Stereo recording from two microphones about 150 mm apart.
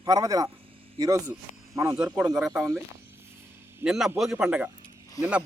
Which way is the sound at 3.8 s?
5° right (ahead or behind).